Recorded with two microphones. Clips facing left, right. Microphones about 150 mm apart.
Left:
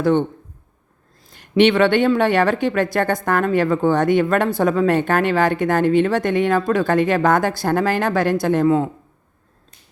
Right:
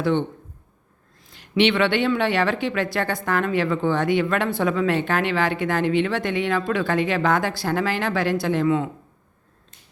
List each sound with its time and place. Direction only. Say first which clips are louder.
0.0 s a woman's voice: left 5 dB; 45° left (ahead or behind)